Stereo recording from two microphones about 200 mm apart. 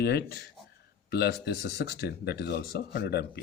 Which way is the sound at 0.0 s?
55° left (ahead or behind).